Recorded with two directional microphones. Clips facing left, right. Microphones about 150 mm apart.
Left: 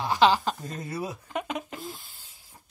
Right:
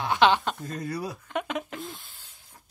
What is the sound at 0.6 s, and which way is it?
Speech, 25° left (ahead or behind).